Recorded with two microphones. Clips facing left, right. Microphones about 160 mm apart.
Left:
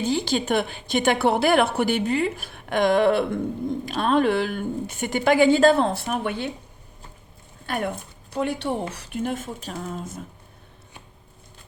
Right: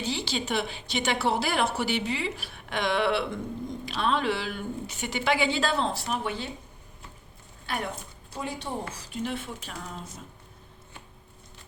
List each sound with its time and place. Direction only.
0.0 s a woman's voice: 50° left (ahead or behind)
7.7 s a woman's voice: 50° left (ahead or behind)
8.3 s a woman's voice: 65° left (ahead or behind); by 10.1 s 45° left (ahead or behind)